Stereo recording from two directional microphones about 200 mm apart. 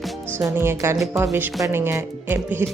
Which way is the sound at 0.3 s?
10° right (ahead or behind).